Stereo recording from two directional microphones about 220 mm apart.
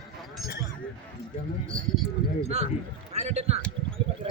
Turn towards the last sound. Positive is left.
turn(degrees=-30)  # may be behind; listen again after turning